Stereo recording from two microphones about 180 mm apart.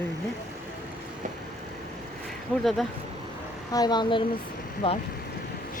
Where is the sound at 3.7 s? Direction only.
20° left (ahead or behind).